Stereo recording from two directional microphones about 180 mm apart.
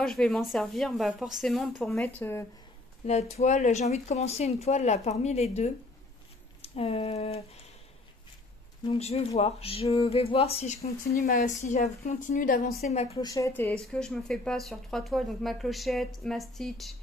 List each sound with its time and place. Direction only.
0.0 s speech: centre (ahead or behind)
2.0 s speech: 10° left (ahead or behind)
3.1 s speech: 35° left (ahead or behind)
8.8 s a woman's voice: 35° left (ahead or behind)
13.2 s speech: 20° left (ahead or behind); by 16.9 s centre (ahead or behind)